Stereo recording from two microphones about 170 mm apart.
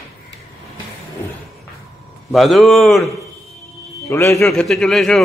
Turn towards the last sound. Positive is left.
turn(degrees=5)  # may be behind; listen again after turning